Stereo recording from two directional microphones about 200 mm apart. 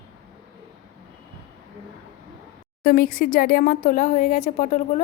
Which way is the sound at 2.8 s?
45° left (ahead or behind).